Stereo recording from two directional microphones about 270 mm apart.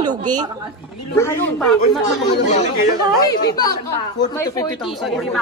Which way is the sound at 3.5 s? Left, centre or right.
Centre.